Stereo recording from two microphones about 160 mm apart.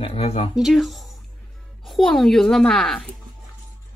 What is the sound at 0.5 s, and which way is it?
Speech, centre (ahead or behind).